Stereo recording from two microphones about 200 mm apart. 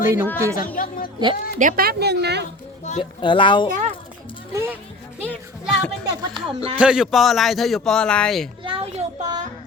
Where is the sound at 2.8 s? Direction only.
35° left (ahead or behind).